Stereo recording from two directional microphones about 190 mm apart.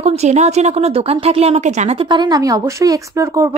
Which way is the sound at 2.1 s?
20° right (ahead or behind).